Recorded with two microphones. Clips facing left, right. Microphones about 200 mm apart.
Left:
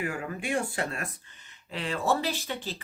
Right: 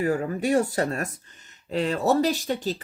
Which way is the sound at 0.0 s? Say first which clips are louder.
Right 9 dB; 40° right (ahead or behind).